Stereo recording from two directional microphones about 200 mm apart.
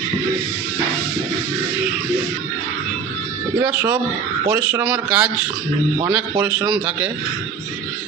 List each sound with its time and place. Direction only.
4.4 s speech: 5° right (ahead or behind)
6.3 s a man's voice: 20° right (ahead or behind)
6.7 s speech: 5° right (ahead or behind)